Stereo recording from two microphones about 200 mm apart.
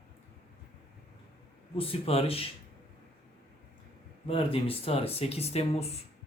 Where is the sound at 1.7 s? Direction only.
30° left (ahead or behind).